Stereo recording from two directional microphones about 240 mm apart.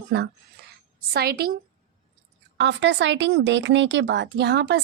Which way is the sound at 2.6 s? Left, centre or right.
Right.